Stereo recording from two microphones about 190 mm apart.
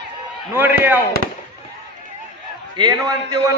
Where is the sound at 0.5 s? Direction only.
10° right (ahead or behind).